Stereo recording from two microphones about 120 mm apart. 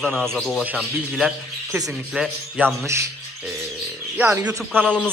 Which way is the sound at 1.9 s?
5° right (ahead or behind).